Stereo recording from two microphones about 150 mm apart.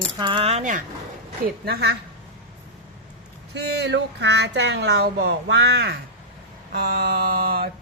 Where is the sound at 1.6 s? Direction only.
90° right.